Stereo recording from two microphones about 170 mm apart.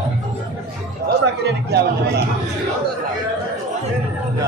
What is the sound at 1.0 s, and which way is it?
Chatter, 75° right (ahead or behind).